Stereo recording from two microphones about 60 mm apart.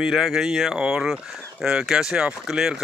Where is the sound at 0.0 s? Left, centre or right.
Centre.